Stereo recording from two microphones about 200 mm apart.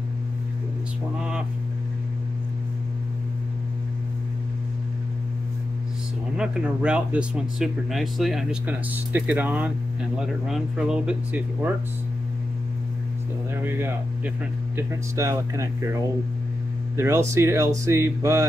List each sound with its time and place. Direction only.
6.3 s speech: 5° right (ahead or behind)
13.7 s speech: 10° right (ahead or behind)